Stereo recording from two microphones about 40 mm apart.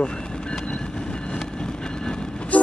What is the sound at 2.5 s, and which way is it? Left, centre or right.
Vehicle, left.